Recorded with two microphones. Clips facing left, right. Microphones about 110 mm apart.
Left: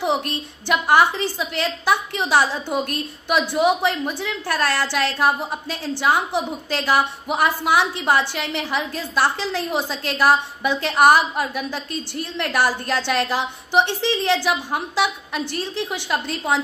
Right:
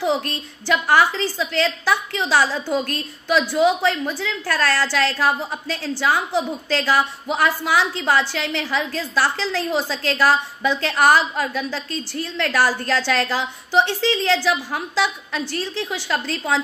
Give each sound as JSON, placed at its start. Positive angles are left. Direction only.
{"t": 0.0, "sound": "a woman's voice", "side_deg": 15}